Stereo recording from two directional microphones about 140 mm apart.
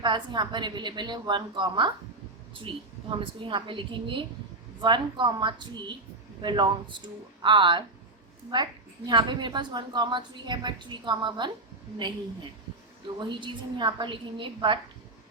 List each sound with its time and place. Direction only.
0.0 s a woman's voice: 30° right (ahead or behind)
3.2 s a woman's voice: 40° right (ahead or behind)
9.0 s a woman's voice: 30° right (ahead or behind)